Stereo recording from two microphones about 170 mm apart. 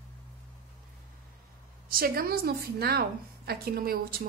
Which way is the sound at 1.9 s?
60° right (ahead or behind).